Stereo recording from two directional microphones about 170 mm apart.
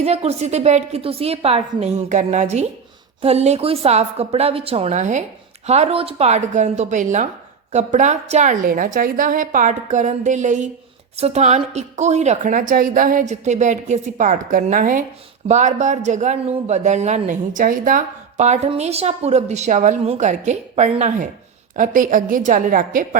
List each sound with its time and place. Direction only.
0.0 s a woman's voice: 40° right (ahead or behind); by 23.0 s 55° right (ahead or behind)